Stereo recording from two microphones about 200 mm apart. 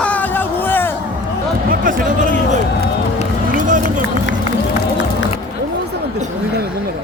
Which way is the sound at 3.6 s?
40° right (ahead or behind).